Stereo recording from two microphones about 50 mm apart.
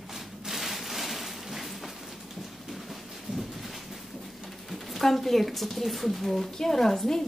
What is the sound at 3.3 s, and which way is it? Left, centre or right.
Thunder, centre.